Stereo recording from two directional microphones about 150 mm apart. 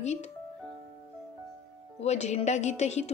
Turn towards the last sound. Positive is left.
turn(degrees=50)  # may be behind; listen again after turning